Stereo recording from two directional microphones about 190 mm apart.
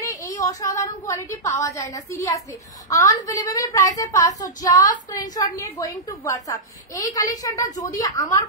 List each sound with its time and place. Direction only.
0.4 s a woman's voice: 20° left (ahead or behind)